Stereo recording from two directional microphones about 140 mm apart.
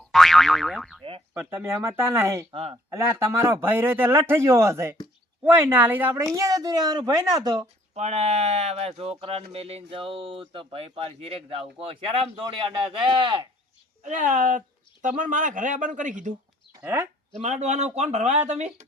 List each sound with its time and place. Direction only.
0.1 s boing: centre (ahead or behind)
1.3 s speech: 15° right (ahead or behind)
2.5 s speech: 45° right (ahead or behind)
2.9 s a woman's voice: 15° right (ahead or behind)
7.9 s speech: 50° right (ahead or behind); by 13.4 s 35° right (ahead or behind)
14.0 s speech: 65° right (ahead or behind)
16.8 s a woman's voice: 20° right (ahead or behind)
17.4 s speech: 55° right (ahead or behind)